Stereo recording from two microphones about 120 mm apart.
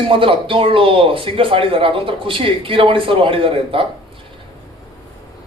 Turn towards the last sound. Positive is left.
turn(degrees=-50)  # may be behind; listen again after turning